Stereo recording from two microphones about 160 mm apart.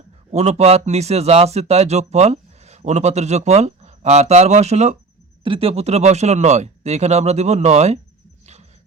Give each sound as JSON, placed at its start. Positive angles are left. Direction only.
{"t": 0.3, "sound": "speech", "side_deg": -40}